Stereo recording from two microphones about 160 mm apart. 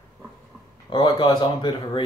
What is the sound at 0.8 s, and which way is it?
Speech, 30° left (ahead or behind).